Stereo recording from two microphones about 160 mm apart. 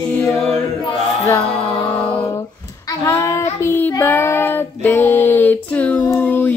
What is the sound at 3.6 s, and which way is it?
Child singing, 15° left (ahead or behind).